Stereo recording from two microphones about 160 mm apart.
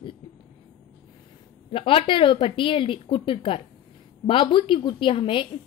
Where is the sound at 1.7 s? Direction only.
35° left (ahead or behind).